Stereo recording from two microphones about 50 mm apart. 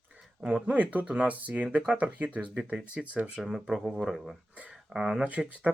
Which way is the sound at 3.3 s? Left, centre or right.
Centre.